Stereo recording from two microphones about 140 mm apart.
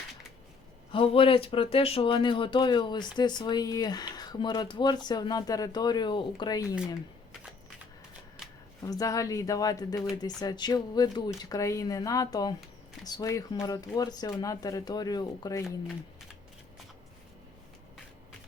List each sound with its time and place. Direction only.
0.9 s speech: 40° left (ahead or behind)
8.8 s speech: 25° left (ahead or behind)